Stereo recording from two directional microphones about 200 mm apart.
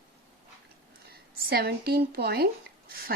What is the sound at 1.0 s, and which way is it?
Speech, 50° right (ahead or behind).